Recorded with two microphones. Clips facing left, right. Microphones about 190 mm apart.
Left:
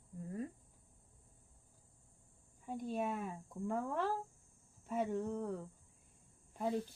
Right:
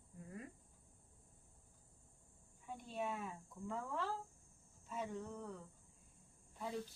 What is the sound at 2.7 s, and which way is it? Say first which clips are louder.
Speech: left 6 dB; 45° left (ahead or behind).